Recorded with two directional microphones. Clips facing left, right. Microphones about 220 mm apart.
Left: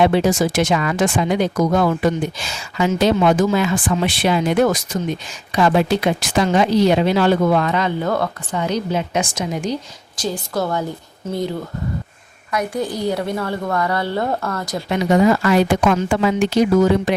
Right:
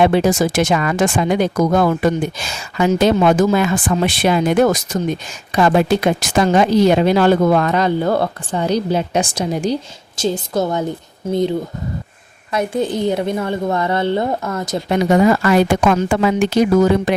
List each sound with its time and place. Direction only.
0.0 s speech: 50° right (ahead or behind); by 9.7 s 35° right (ahead or behind)
10.2 s a woman's voice: 25° right (ahead or behind)
12.5 s a woman's voice: 25° right (ahead or behind)
14.8 s speech: 45° right (ahead or behind)